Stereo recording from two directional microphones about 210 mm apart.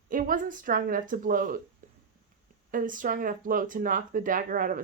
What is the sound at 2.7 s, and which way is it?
Speech, 40° right (ahead or behind).